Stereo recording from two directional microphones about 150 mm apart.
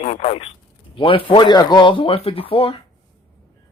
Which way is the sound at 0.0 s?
45° left (ahead or behind).